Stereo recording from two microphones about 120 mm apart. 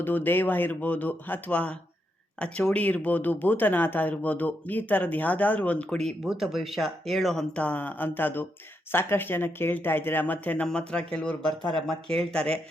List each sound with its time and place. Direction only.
0.0 s speech: 15° left (ahead or behind)
11.6 s speech: 45° right (ahead or behind)
12.1 s speech: 5° left (ahead or behind)